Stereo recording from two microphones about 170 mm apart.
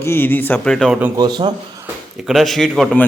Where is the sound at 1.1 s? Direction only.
25° right (ahead or behind).